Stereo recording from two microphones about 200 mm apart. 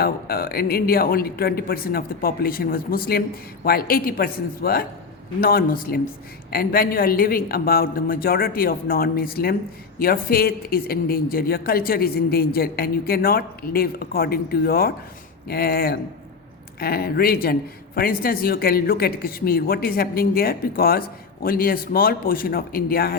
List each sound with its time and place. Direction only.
0.0 s speech: 50° left (ahead or behind)